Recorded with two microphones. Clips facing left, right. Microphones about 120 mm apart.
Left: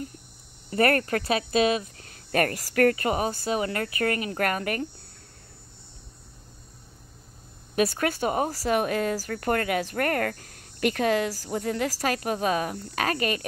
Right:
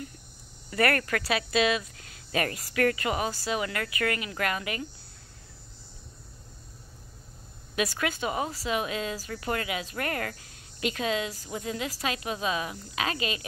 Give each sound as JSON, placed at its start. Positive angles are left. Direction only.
{"t": 0.7, "sound": "speech", "side_deg": 35}
{"t": 2.3, "sound": "speech", "side_deg": 50}
{"t": 3.6, "sound": "speech", "side_deg": 35}
{"t": 8.0, "sound": "speech", "side_deg": 45}